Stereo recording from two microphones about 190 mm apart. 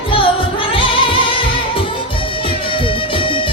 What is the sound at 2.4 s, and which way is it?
Music, 25° left (ahead or behind).